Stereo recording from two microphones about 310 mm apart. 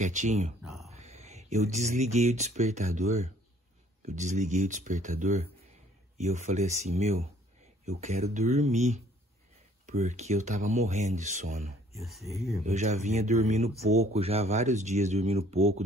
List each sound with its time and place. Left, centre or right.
0.0 s speech: right
0.6 s a sound: centre
0.8 s speech: right
11.9 s speech: centre
12.6 s speech: right